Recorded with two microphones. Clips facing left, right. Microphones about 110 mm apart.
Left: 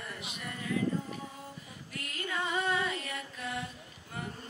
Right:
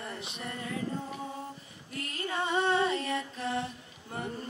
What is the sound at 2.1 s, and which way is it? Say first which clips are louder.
Music: right 3 dB; 30° right (ahead or behind).